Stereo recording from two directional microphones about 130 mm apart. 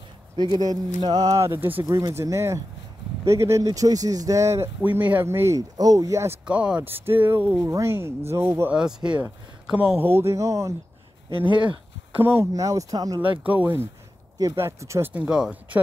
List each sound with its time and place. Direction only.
0.4 s speech: 30° right (ahead or behind)
6.4 s speech: 10° right (ahead or behind); by 10.7 s 25° right (ahead or behind)
11.5 s speech: 40° right (ahead or behind)
12.2 s speech: 15° right (ahead or behind)
13.4 s speech: 10° right (ahead or behind)
15.1 s speech: 5° right (ahead or behind)